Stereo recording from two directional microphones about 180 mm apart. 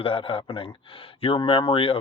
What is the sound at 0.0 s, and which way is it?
Speech, 30° left (ahead or behind).